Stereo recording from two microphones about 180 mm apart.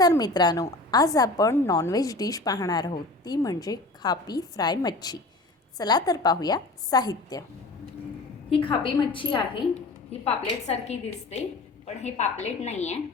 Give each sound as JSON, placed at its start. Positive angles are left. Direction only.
{"t": 0.0, "sound": "a woman's voice", "side_deg": 20}
{"t": 8.4, "sound": "a woman's voice", "side_deg": 30}